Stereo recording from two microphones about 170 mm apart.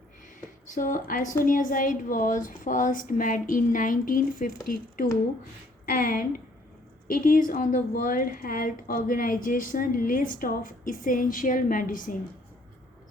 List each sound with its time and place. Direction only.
0.7 s a woman's voice: 55° left (ahead or behind)
5.8 s a woman's voice: 55° left (ahead or behind)